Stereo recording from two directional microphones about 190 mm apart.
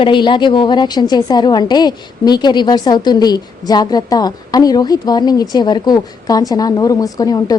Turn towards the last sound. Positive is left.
turn(degrees=20)  # may be behind; listen again after turning